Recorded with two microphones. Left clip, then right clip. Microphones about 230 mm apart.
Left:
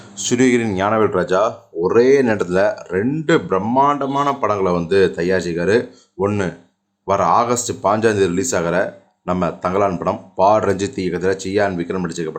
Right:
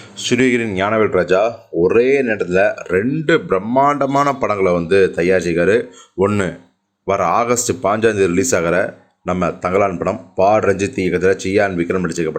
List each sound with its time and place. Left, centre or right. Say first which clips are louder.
0.2 s speech: right 1 dB; centre
2.2 s speech: right 1 dB; centre
3.8 s a man's voice: right 2 dB; centre